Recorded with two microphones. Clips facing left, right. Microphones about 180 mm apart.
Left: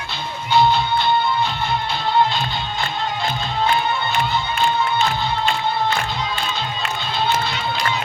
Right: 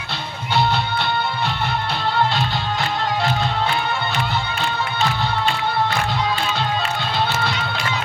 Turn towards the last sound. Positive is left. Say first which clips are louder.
# even
turn(degrees=-70)  # may be behind; listen again after turning